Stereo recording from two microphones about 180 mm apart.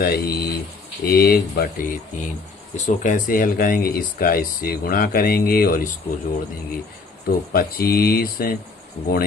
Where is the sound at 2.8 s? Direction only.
45° left (ahead or behind).